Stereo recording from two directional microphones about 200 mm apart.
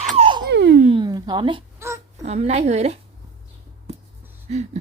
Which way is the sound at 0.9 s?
20° right (ahead or behind).